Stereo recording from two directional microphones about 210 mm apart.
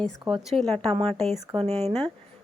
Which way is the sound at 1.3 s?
30° right (ahead or behind).